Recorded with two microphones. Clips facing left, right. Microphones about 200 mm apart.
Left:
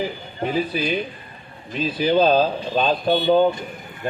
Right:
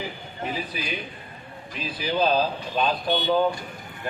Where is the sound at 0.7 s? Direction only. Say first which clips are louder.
Left 9 dB; 25° left (ahead or behind).